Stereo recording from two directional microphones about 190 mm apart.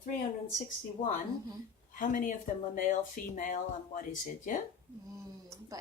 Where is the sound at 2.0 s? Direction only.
45° left (ahead or behind).